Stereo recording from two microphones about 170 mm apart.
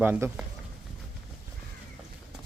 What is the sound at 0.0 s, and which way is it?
Speech, 10° right (ahead or behind).